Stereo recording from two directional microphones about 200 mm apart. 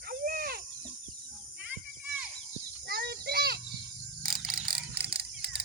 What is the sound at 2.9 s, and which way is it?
Children playing, 55° right (ahead or behind).